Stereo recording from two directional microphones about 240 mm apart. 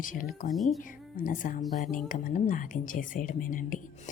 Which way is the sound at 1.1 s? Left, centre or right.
Left.